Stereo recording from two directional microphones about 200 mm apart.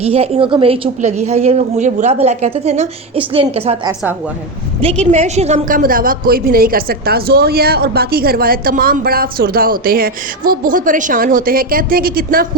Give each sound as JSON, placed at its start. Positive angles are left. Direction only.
{"t": 0.0, "sound": "a woman's voice", "side_deg": -30}
{"t": 5.1, "sound": "a woman's voice", "side_deg": -35}